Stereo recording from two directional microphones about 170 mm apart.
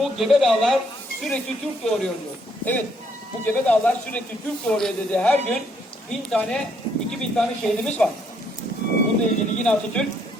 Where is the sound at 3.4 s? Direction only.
5° left (ahead or behind).